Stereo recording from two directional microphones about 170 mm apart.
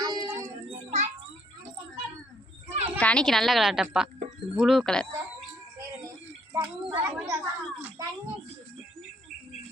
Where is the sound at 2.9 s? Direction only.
5° left (ahead or behind).